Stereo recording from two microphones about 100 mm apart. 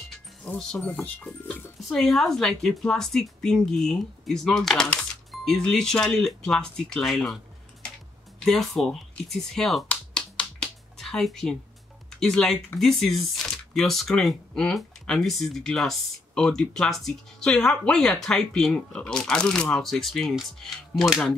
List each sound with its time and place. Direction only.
0.8 s speech: 15° left (ahead or behind)
1.8 s speech: centre (ahead or behind)
8.5 s speech: 5° left (ahead or behind)
9.8 s finger snapping: 10° left (ahead or behind)
12.2 s speech: 5° left (ahead or behind)